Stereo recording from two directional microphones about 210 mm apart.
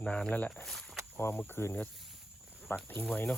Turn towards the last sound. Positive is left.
turn(degrees=10)  # may be behind; listen again after turning